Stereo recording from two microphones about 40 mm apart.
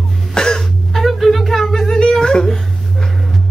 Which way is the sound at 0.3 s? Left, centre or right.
Centre.